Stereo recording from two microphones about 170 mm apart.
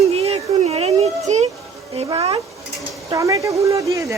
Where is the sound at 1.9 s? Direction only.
30° right (ahead or behind).